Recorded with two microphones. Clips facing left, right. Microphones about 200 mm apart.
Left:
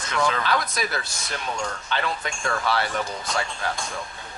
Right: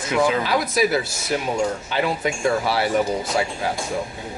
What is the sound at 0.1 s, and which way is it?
Speech, 5° right (ahead or behind).